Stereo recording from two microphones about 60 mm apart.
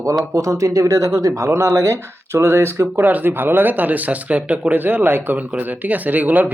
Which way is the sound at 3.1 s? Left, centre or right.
Right.